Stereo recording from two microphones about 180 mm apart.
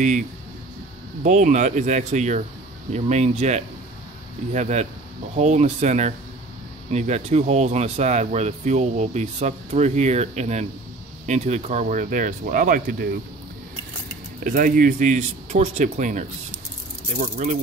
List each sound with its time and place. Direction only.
1.2 s speech: 40° right (ahead or behind)
14.4 s speech: 50° right (ahead or behind)